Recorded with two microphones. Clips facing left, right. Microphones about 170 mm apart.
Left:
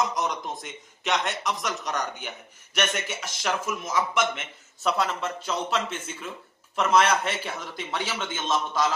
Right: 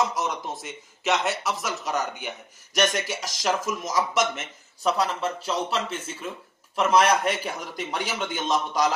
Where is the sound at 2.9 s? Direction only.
35° right (ahead or behind).